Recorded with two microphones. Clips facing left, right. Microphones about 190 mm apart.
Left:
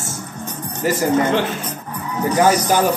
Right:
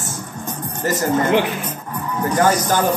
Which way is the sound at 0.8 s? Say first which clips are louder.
Left 2 dB; 10° left (ahead or behind).